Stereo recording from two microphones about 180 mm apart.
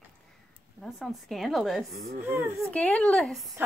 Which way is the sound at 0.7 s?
Centre (ahead or behind).